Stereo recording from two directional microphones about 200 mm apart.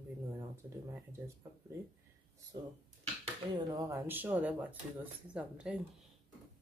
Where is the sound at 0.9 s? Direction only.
15° right (ahead or behind).